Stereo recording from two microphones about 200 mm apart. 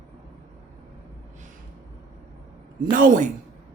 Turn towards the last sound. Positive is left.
turn(degrees=-40)  # may be behind; listen again after turning